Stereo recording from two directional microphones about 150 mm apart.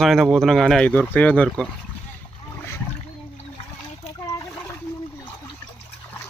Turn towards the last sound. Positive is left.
turn(degrees=20)  # may be behind; listen again after turning